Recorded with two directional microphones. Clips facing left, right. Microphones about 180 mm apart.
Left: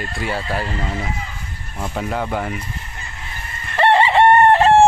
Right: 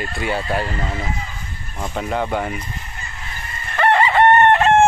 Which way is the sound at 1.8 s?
Centre (ahead or behind).